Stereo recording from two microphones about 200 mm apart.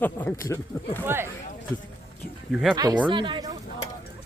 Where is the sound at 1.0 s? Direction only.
10° right (ahead or behind).